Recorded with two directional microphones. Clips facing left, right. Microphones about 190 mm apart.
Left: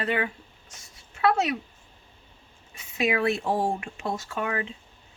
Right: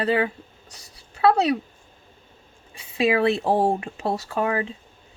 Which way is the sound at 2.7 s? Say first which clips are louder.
Right 5 dB; 30° right (ahead or behind).